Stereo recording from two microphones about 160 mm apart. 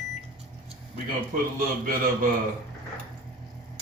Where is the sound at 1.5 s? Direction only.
60° right (ahead or behind).